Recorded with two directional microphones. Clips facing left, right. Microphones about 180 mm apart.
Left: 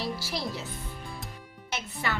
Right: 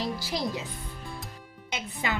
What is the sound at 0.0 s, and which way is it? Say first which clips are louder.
Music: right 2 dB; 15° right (ahead or behind).